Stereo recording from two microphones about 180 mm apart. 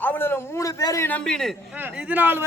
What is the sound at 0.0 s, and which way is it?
A man's voice, 10° left (ahead or behind).